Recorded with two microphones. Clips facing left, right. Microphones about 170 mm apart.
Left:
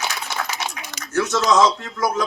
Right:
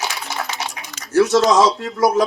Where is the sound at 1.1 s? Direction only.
30° right (ahead or behind).